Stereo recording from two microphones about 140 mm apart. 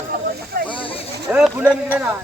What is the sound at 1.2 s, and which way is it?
Speech, 5° right (ahead or behind).